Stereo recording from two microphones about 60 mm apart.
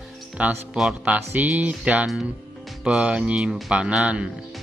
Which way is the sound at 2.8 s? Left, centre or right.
Centre.